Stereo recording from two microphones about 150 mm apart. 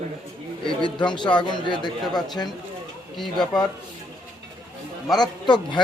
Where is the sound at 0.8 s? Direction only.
30° left (ahead or behind).